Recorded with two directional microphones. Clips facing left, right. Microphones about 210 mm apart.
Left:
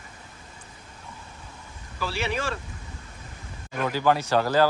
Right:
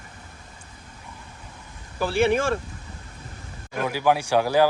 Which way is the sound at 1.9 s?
55° right (ahead or behind).